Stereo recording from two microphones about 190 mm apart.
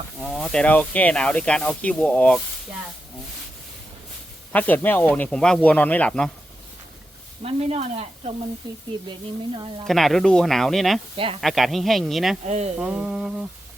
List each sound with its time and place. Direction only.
0.2 s speech: centre (ahead or behind)
4.5 s speech: 10° left (ahead or behind)
7.4 s speech: 30° right (ahead or behind)
9.8 s speech: centre (ahead or behind)
12.5 s speech: 35° right (ahead or behind)
12.8 s speech: 5° right (ahead or behind)